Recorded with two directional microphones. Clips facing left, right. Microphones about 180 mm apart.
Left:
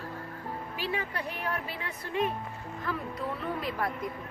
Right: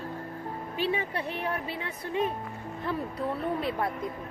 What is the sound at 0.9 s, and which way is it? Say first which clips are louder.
Speech: right 3 dB; 25° right (ahead or behind).